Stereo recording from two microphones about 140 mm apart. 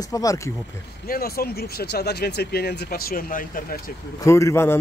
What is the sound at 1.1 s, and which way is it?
Speech, 90° left.